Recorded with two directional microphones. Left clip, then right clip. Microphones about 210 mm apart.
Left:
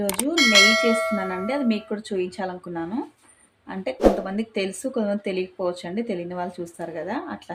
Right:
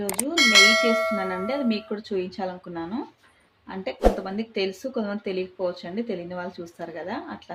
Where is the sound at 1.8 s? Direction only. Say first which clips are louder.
Left 2 dB; 20° left (ahead or behind).